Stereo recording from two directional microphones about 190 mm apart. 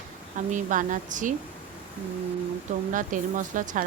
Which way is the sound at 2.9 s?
45° right (ahead or behind).